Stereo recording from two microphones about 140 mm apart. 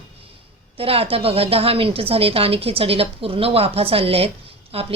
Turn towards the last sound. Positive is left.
turn(degrees=-40)  # may be behind; listen again after turning